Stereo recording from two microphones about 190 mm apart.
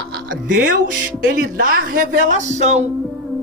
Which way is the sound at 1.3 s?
45° right (ahead or behind).